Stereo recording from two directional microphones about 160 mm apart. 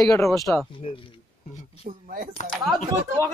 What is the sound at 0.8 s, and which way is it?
Speech, 35° left (ahead or behind).